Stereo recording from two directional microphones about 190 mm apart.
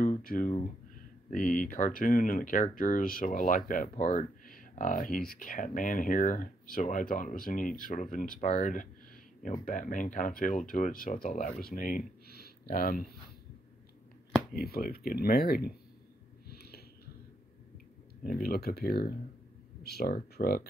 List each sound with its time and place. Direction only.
0.0 s speech: 45° left (ahead or behind)
14.5 s speech: 50° left (ahead or behind)
16.4 s a sound: 55° left (ahead or behind)
18.2 s speech: 50° left (ahead or behind)